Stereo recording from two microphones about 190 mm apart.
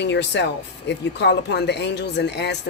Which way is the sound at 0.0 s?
65° left (ahead or behind).